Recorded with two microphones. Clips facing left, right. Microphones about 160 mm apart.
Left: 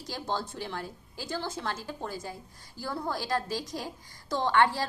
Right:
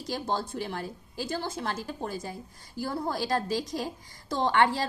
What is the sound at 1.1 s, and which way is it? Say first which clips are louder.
A woman's voice: right 2 dB; 15° right (ahead or behind).